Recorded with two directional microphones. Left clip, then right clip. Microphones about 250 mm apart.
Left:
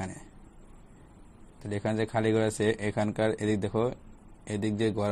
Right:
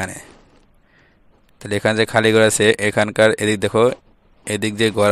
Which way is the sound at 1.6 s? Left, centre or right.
Right.